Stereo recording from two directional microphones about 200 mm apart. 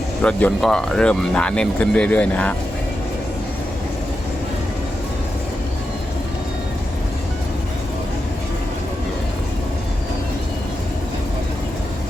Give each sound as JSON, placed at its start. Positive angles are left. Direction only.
{"t": 0.2, "sound": "speech", "side_deg": 5}